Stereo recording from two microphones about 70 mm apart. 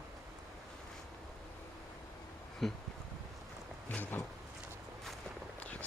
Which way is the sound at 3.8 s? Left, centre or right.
Left.